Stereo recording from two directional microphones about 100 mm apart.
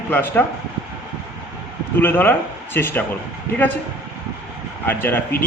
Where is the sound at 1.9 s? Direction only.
20° left (ahead or behind).